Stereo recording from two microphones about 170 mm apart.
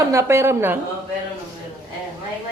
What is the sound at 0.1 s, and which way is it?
Speech, 15° right (ahead or behind).